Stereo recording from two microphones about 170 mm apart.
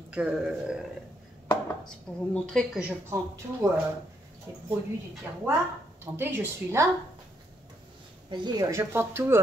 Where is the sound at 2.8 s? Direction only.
10° right (ahead or behind).